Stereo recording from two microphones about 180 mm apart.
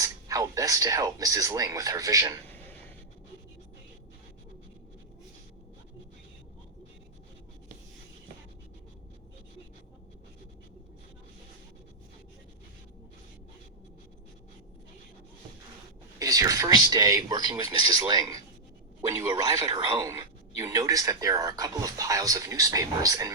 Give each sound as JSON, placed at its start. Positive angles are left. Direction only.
{"t": 0.0, "sound": "speech", "side_deg": -20}
{"t": 16.1, "sound": "speech", "side_deg": -20}